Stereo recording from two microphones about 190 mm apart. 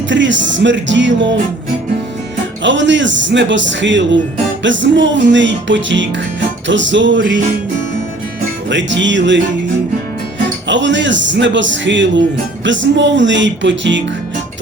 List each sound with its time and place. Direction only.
0.1 s speech: 75° right (ahead or behind)
2.6 s speech: 70° right (ahead or behind)
8.7 s speech: 70° right (ahead or behind)
10.7 s speech: 70° right (ahead or behind)